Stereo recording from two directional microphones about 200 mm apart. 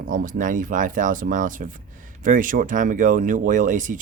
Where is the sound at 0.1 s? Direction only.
40° right (ahead or behind).